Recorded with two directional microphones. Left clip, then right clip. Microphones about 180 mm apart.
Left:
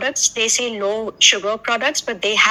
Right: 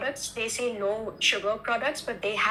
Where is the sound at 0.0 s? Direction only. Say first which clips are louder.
Left 12 dB; 40° left (ahead or behind).